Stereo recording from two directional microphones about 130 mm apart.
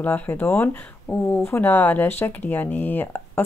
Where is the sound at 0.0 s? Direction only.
15° left (ahead or behind).